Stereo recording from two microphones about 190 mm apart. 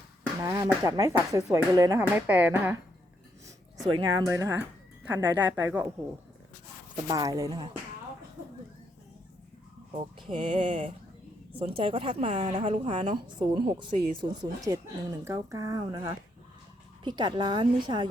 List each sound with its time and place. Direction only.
0.4 s speech: 20° right (ahead or behind)
3.8 s speech: 25° right (ahead or behind)
7.1 s speech: 20° right (ahead or behind)
9.9 s speech: 30° right (ahead or behind)